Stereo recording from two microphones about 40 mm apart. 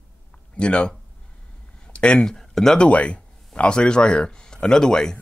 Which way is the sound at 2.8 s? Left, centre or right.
Left.